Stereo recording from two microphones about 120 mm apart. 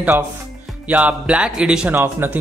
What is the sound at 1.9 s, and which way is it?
Speech, 20° right (ahead or behind).